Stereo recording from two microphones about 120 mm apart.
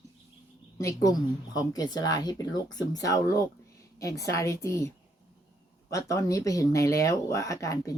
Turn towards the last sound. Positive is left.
turn(degrees=25)  # may be behind; listen again after turning